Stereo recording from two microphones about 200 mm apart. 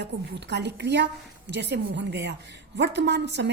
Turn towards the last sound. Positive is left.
turn(degrees=-60)  # may be behind; listen again after turning